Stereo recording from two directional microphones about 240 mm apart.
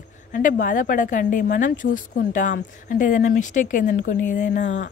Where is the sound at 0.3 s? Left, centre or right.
Left.